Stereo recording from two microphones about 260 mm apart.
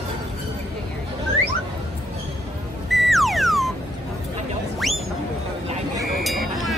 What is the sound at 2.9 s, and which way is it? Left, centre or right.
Music, centre.